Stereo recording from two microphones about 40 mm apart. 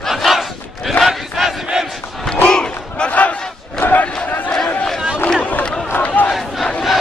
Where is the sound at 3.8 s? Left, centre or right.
Left.